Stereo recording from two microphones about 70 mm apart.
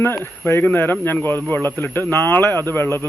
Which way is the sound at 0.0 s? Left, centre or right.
Left.